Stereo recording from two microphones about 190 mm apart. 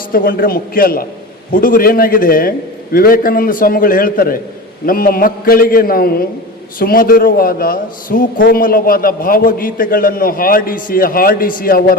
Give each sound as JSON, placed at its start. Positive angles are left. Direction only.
{"t": 0.1, "sound": "a man's voice", "side_deg": 50}